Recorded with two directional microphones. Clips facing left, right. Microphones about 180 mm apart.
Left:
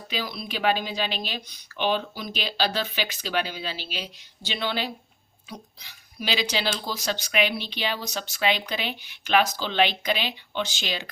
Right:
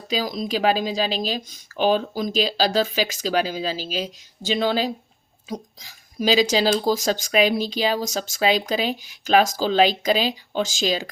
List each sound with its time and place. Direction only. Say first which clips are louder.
0.1 s speech: right 8 dB; 40° right (ahead or behind)